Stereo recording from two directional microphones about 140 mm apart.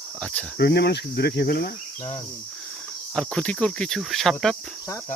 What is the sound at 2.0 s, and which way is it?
Cricket, 55° left (ahead or behind).